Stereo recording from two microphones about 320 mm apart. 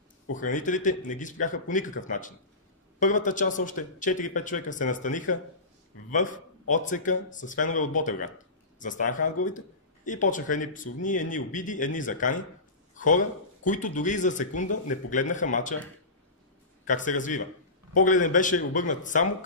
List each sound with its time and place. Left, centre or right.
0.3 s a man's voice: left
16.8 s speech: left